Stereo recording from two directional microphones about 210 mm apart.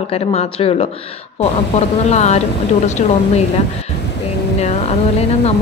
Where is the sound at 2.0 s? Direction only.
30° left (ahead or behind).